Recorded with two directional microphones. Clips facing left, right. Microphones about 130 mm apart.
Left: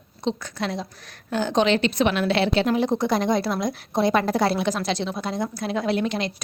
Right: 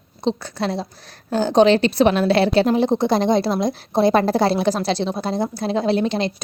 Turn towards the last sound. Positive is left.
turn(degrees=-30)  # may be behind; listen again after turning